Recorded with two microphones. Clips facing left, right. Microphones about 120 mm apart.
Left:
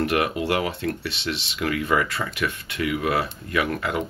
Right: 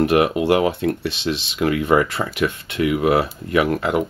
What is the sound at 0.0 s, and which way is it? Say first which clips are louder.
Speech: right 6 dB; 20° right (ahead or behind).